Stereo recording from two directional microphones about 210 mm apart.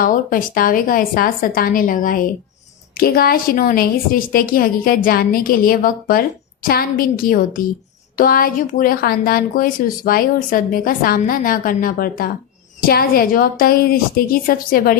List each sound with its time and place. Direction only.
0.0 s a woman's voice: 40° left (ahead or behind)